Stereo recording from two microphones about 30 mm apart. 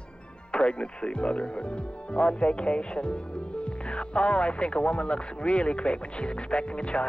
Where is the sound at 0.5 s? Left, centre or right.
Left.